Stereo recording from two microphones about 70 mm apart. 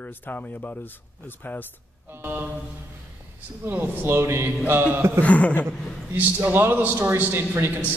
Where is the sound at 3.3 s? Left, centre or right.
Right.